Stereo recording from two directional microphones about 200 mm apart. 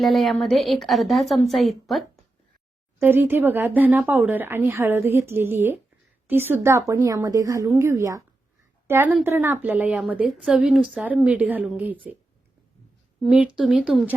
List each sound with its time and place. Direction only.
0.0 s a woman's voice: centre (ahead or behind)
3.0 s speech: 10° right (ahead or behind)
13.2 s a woman's voice: 5° right (ahead or behind)